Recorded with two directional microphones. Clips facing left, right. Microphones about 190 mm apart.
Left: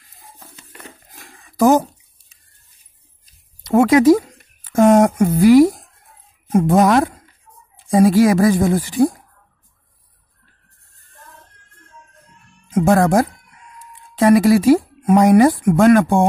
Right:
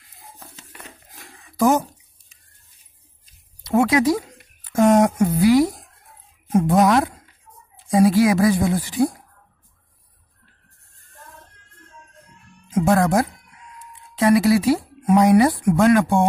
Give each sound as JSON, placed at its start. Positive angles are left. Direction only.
{"t": 1.6, "sound": "speech", "side_deg": 35}
{"t": 3.6, "sound": "speech", "side_deg": 50}
{"t": 6.5, "sound": "speech", "side_deg": 50}
{"t": 12.7, "sound": "speech", "side_deg": 45}